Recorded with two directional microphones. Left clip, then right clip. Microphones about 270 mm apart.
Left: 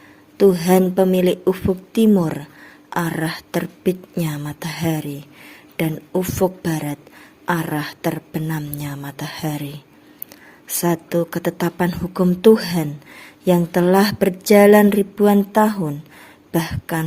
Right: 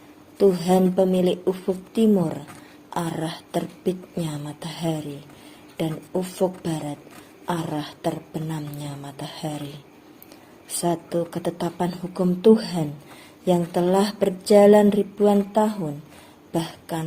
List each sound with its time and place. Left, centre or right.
0.3 s a woman's voice: left